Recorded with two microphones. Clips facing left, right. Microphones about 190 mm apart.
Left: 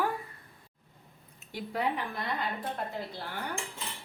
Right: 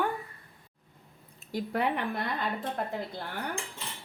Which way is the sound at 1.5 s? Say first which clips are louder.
Right 6 dB; 40° right (ahead or behind).